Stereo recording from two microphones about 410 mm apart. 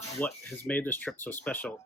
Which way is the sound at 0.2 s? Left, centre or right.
Centre.